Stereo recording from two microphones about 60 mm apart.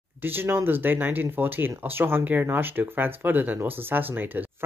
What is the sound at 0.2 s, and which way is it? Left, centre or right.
Speech, right.